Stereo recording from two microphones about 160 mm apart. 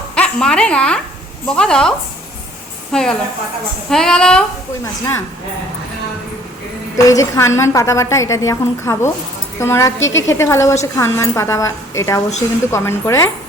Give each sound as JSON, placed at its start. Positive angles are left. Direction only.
{"t": 0.2, "sound": "speech", "side_deg": 5}
{"t": 6.9, "sound": "a woman's voice", "side_deg": 20}